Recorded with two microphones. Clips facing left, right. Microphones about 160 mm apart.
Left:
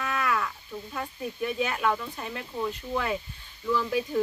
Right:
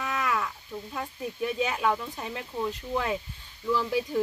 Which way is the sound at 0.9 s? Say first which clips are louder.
Left 1 dB; 15° right (ahead or behind).